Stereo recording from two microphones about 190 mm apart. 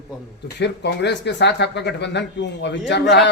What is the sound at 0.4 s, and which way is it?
Speech, 65° left (ahead or behind).